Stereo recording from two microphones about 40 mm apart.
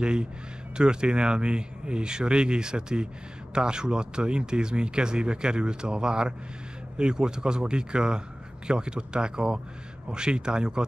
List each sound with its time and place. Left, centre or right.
0.0 s speech: right